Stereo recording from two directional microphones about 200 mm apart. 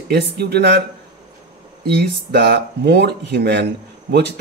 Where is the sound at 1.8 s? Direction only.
55° right (ahead or behind).